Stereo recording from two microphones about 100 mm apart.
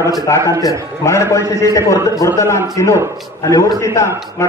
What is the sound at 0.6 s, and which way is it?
A man's voice, 35° left (ahead or behind).